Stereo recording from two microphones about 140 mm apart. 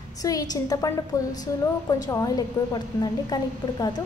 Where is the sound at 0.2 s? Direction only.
25° left (ahead or behind).